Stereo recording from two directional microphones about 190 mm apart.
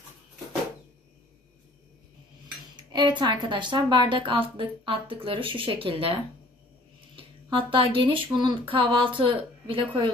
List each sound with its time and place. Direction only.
2.7 s speech: 25° right (ahead or behind)
7.2 s speech: 25° right (ahead or behind)